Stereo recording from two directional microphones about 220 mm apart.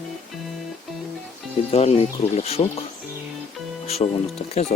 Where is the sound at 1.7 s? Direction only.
30° left (ahead or behind).